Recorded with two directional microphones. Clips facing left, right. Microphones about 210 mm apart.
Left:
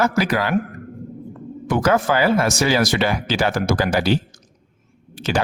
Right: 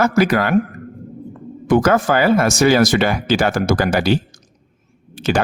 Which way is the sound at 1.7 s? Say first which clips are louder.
Right 4 dB; 50° right (ahead or behind).